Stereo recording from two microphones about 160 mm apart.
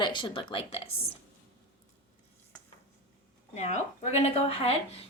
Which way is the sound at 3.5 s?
45° left (ahead or behind).